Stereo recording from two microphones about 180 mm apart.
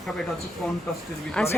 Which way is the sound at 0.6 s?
Centre (ahead or behind).